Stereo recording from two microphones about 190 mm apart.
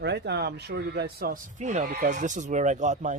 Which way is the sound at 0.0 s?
60° right (ahead or behind).